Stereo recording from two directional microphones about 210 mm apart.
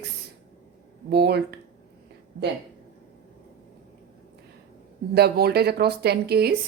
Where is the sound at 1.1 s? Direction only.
50° right (ahead or behind).